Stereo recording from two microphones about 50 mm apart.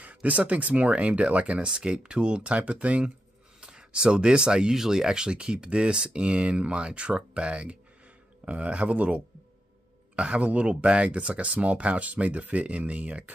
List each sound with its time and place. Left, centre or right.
0.0 s speech: right
3.6 s speech: centre